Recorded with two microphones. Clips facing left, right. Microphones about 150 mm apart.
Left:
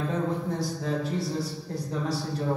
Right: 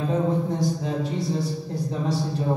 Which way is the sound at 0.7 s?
20° right (ahead or behind).